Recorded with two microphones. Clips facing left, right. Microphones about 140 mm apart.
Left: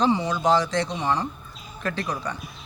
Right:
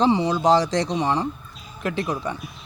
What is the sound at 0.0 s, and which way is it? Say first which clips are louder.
Speech: right 3 dB; 30° right (ahead or behind).